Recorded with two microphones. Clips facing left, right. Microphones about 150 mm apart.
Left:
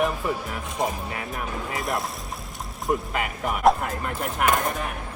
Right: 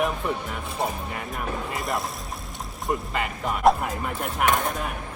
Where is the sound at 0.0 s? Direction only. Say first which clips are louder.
Left 1 dB; centre (ahead or behind).